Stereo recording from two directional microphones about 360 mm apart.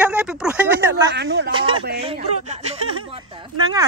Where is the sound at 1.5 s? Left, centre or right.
Centre.